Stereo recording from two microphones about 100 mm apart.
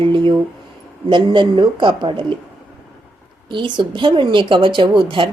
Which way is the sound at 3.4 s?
50° right (ahead or behind).